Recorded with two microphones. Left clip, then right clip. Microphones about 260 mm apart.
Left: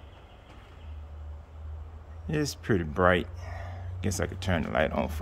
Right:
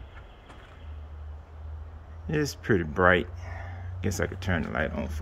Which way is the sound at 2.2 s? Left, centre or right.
Centre.